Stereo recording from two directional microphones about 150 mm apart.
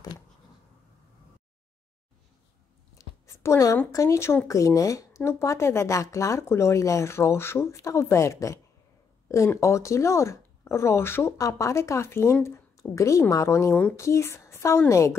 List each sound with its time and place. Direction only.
3.0 s speech: 20° left (ahead or behind)